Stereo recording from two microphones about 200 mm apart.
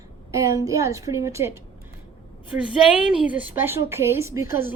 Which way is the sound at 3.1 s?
5° right (ahead or behind).